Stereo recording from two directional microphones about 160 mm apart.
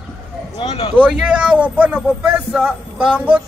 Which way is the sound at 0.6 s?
35° left (ahead or behind).